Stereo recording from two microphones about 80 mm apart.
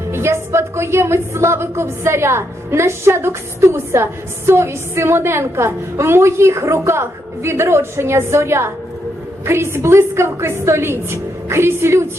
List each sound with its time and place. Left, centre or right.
0.1 s a woman's voice: right